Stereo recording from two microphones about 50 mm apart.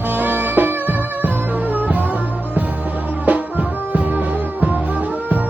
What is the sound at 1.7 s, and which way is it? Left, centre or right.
Music, right.